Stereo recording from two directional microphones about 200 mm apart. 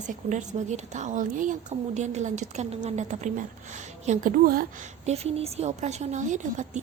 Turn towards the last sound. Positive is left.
turn(degrees=-40)  # may be behind; listen again after turning